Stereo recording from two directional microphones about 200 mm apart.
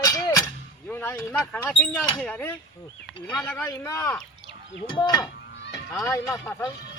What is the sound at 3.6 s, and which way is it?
Speech, 15° left (ahead or behind).